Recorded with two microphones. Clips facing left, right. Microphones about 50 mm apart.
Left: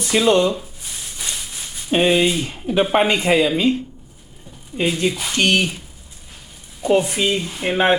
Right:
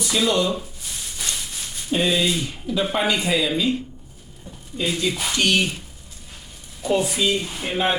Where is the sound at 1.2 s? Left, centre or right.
Centre.